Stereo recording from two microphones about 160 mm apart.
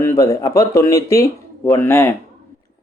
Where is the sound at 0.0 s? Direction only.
20° left (ahead or behind).